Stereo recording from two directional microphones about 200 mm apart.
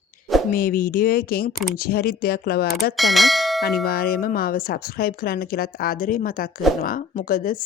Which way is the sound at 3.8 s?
50° left (ahead or behind).